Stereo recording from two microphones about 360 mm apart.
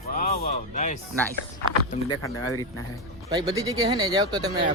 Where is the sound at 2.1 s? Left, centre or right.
Centre.